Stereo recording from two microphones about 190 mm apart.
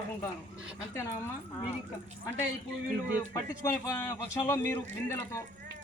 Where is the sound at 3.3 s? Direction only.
20° left (ahead or behind).